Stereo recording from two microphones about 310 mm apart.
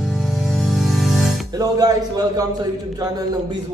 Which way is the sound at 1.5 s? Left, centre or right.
Centre.